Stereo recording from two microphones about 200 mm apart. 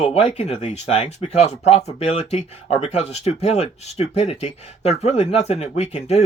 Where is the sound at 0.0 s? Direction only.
30° left (ahead or behind).